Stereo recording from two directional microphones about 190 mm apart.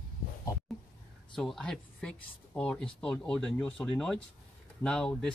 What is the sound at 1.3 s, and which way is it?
Speech, centre (ahead or behind).